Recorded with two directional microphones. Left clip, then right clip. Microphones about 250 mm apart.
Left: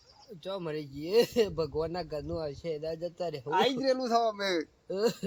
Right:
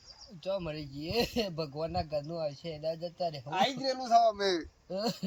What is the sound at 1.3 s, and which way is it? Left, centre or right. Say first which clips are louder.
Speech: left 6 dB; left.